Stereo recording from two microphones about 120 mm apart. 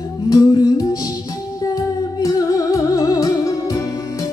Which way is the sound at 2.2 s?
30° left (ahead or behind).